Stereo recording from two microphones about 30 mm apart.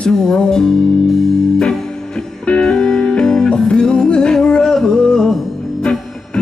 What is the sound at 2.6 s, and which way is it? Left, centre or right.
Music, left.